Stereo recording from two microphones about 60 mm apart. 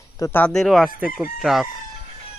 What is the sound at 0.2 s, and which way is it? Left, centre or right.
Speech, left.